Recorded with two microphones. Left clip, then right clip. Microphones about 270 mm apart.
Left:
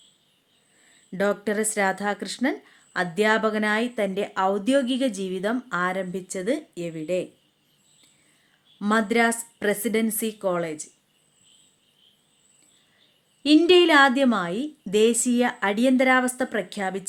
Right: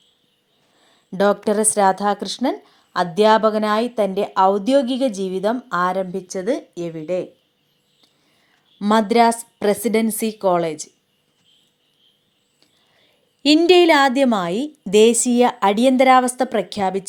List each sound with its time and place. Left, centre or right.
0.8 s a sound: centre
2.0 s a woman's voice: centre
8.8 s a woman's voice: centre
13.4 s a woman's voice: centre